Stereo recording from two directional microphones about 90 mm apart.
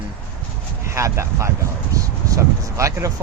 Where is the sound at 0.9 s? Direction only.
35° right (ahead or behind).